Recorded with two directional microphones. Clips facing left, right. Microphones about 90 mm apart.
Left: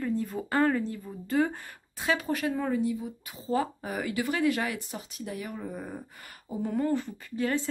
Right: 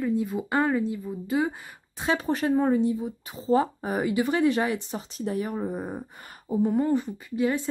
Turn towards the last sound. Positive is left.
turn(degrees=-15)  # may be behind; listen again after turning